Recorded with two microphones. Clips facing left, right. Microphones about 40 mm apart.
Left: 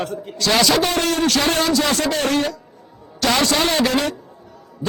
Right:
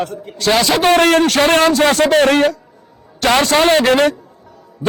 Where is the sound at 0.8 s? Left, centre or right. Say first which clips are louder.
Right 8 dB; right.